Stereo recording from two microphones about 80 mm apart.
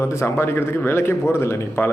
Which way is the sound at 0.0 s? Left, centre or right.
Left.